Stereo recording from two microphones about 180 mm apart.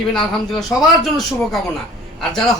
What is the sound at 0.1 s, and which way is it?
Speech, centre (ahead or behind).